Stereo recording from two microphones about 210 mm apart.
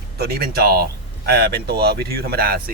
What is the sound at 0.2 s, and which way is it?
Speech, 45° right (ahead or behind).